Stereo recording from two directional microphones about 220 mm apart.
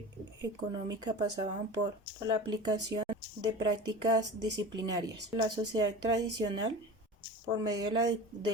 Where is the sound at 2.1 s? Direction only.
20° right (ahead or behind).